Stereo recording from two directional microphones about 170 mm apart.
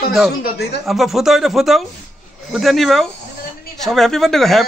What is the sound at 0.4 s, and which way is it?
Speech, 70° left (ahead or behind).